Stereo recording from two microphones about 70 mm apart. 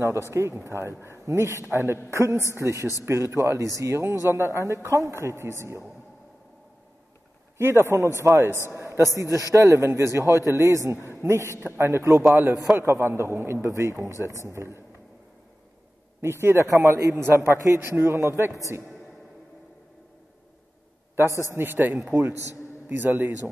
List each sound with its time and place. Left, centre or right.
0.3 s a man's voice: right
7.5 s a man's voice: right
16.2 s a man's voice: right
17.1 s a man's voice: right
21.5 s a man's voice: right